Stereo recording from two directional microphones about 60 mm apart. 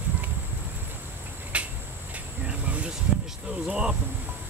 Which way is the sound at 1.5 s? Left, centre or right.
Right.